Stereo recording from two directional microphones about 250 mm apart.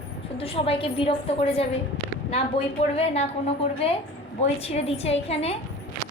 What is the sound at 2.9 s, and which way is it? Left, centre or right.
A woman's voice, left.